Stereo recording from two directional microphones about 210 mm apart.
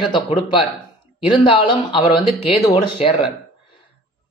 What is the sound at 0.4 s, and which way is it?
Speech, 25° left (ahead or behind).